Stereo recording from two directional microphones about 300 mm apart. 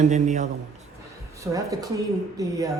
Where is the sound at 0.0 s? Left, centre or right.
Right.